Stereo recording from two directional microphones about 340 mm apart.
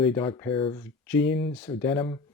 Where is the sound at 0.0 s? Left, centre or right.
Centre.